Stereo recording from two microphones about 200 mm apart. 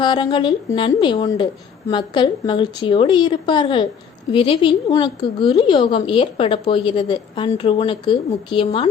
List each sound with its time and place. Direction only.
0.0 s a woman's voice: 25° left (ahead or behind)